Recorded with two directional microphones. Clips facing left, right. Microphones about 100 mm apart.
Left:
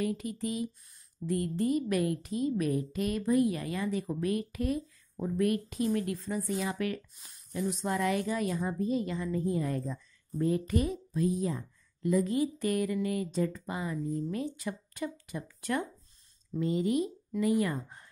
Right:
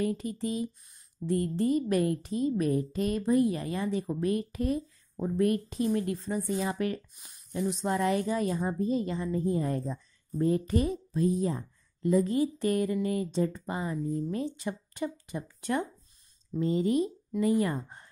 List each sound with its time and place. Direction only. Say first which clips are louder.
0.0 s a woman's voice: right 2 dB; 35° right (ahead or behind)